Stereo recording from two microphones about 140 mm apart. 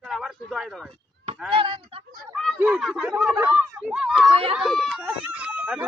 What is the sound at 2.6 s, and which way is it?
Speech, 5° right (ahead or behind).